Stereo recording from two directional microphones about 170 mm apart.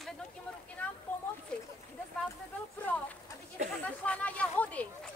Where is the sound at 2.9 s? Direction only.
10° left (ahead or behind).